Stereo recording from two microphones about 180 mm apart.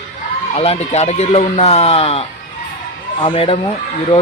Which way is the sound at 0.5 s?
35° left (ahead or behind).